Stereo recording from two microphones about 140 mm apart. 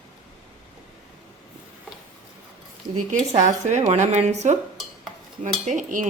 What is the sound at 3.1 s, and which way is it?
Speech, 60° right (ahead or behind).